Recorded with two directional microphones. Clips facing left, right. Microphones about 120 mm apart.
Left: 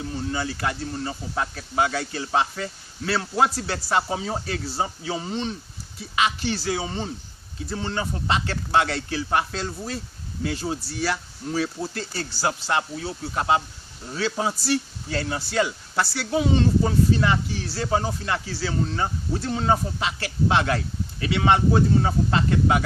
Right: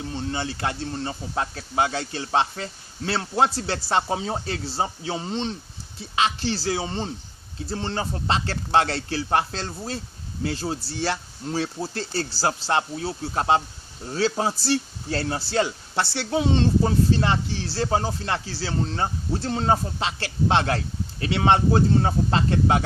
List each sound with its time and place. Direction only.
0.1 s speech: 25° right (ahead or behind)